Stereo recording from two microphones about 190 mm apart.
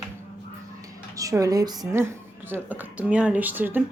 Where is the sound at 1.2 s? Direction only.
15° right (ahead or behind).